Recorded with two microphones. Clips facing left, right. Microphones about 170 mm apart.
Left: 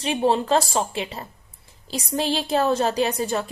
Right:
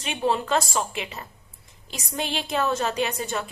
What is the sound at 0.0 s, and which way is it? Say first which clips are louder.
A woman's voice: left 4 dB; 35° left (ahead or behind).